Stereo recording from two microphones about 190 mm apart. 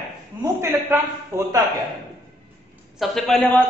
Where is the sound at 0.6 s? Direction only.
15° right (ahead or behind).